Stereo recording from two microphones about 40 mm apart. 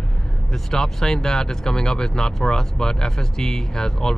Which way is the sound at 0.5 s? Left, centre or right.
Centre.